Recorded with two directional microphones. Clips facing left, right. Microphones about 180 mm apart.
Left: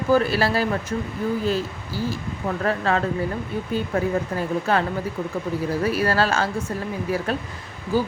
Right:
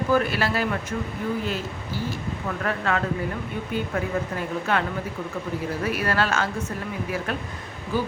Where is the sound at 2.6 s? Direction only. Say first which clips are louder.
Left 3 dB; 35° left (ahead or behind).